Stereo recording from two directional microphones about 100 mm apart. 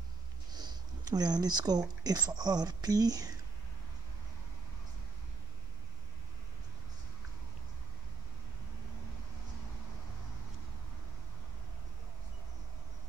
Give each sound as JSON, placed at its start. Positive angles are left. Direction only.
{"t": 0.5, "sound": "speech", "side_deg": -40}